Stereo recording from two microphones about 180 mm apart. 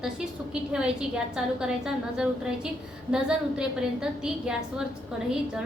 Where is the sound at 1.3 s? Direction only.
5° right (ahead or behind).